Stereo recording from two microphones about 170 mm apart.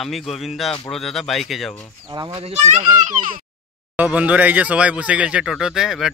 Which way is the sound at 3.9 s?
10° right (ahead or behind).